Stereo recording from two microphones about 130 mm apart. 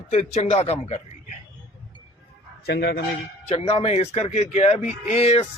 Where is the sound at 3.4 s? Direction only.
50° left (ahead or behind).